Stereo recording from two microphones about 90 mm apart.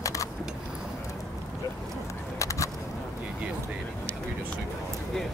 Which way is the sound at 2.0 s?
35° left (ahead or behind).